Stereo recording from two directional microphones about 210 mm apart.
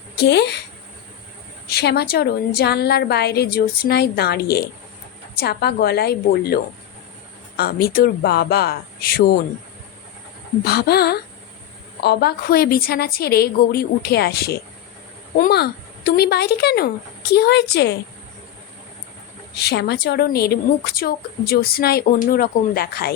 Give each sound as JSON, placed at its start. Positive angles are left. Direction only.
{"t": 0.2, "sound": "a woman's voice", "side_deg": 50}
{"t": 1.7, "sound": "a woman's voice", "side_deg": 50}
{"t": 10.6, "sound": "a woman's voice", "side_deg": 50}
{"t": 19.5, "sound": "a woman's voice", "side_deg": 50}